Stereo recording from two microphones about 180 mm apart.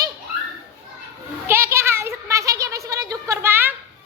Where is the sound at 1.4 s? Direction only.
15° right (ahead or behind).